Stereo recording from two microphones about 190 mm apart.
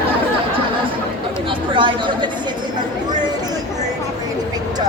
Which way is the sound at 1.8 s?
25° right (ahead or behind).